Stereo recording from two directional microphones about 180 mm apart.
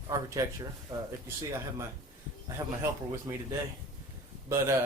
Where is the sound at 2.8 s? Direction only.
20° right (ahead or behind).